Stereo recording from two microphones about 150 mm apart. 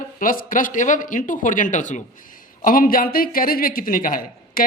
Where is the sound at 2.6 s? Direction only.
70° left (ahead or behind).